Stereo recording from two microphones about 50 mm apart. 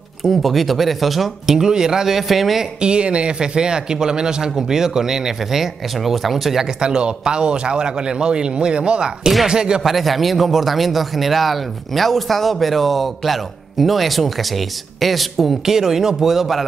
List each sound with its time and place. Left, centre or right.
0.2 s speech: centre
2.8 s speech: centre
6.6 s speech: centre
9.9 s speech: centre